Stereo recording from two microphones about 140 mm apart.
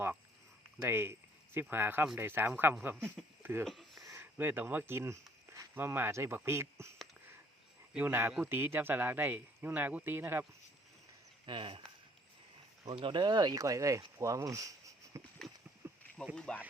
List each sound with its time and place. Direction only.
0.8 s speech: 15° right (ahead or behind)
3.6 s a sound: centre (ahead or behind)
4.0 s speech: 20° right (ahead or behind)
7.9 s speech: 15° right (ahead or behind)
11.4 s speech: 35° right (ahead or behind)
12.8 s speech: 35° right (ahead or behind)
15.8 s a sound: 15° right (ahead or behind)
16.3 s speech: 5° left (ahead or behind)